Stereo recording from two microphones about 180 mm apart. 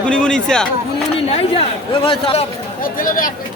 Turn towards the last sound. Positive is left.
turn(degrees=50)  # may be behind; listen again after turning